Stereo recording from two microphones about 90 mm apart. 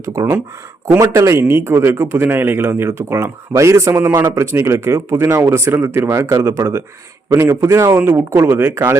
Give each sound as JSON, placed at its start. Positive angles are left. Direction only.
{"t": 0.0, "sound": "a man's voice", "side_deg": -40}